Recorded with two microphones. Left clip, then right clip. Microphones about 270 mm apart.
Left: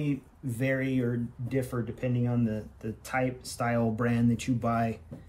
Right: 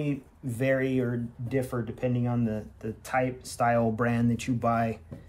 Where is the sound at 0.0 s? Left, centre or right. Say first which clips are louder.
Right 1 dB; centre.